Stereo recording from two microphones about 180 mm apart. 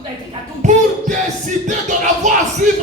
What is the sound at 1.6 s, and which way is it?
Music, 45° right (ahead or behind).